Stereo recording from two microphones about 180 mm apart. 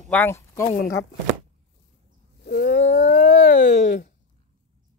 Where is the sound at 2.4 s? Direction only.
65° left (ahead or behind).